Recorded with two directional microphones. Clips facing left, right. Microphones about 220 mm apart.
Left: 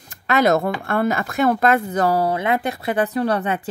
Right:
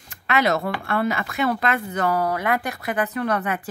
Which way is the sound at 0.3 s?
45° left (ahead or behind).